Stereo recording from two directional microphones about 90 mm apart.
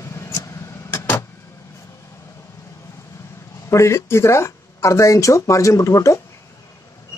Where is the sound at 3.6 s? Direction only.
30° left (ahead or behind).